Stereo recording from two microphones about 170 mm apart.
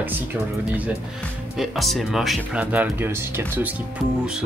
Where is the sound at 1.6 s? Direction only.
Centre (ahead or behind).